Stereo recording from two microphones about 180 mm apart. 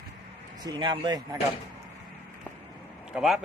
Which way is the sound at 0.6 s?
25° right (ahead or behind).